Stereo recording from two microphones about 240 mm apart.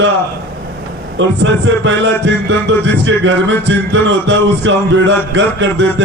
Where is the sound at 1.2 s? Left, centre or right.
Right.